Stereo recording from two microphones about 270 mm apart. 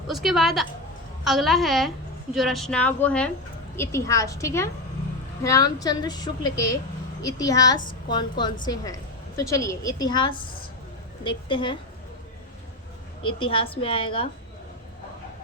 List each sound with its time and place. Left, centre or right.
0.1 s a woman's voice: centre
13.4 s a woman's voice: centre